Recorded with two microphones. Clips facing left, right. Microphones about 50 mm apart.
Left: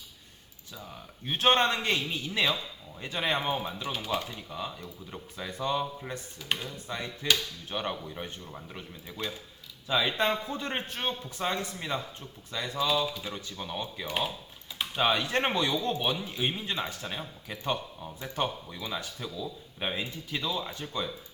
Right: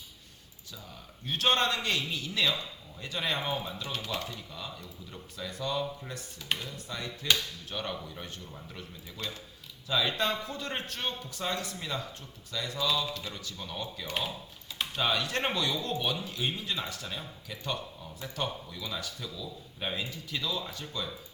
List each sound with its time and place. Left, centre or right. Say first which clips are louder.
0.8 s speech: left 5 dB; left
12.9 s speech: left 3 dB; centre
13.3 s speech: left 3 dB; left